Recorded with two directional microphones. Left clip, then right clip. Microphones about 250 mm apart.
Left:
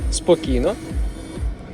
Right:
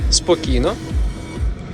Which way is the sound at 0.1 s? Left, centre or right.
Centre.